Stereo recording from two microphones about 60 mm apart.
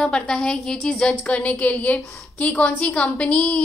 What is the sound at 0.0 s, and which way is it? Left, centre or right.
A woman's voice, centre.